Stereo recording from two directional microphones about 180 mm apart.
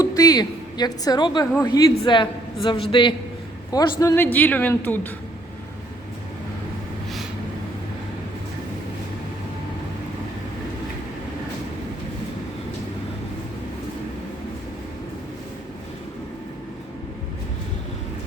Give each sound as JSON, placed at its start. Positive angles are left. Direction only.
{"t": 0.0, "sound": "a woman's voice", "side_deg": 20}